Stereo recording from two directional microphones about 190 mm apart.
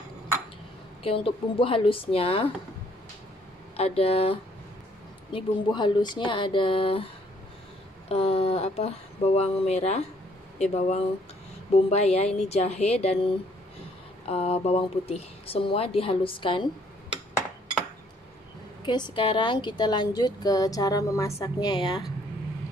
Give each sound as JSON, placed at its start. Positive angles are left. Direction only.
{"t": 1.0, "sound": "a woman's voice", "side_deg": 30}
{"t": 3.7, "sound": "a woman's voice", "side_deg": 30}
{"t": 8.1, "sound": "speech", "side_deg": 30}
{"t": 18.9, "sound": "a woman's voice", "side_deg": 25}